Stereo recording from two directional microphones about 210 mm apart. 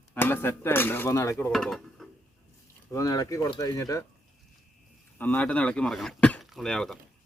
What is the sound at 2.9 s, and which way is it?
Speech, 15° left (ahead or behind).